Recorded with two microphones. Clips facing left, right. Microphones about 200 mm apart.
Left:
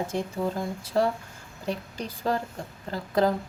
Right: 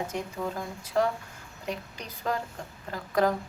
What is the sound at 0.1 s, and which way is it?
A woman's voice, 30° left (ahead or behind).